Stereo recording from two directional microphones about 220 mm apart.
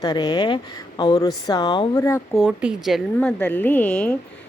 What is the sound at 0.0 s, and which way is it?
Speech, 20° left (ahead or behind).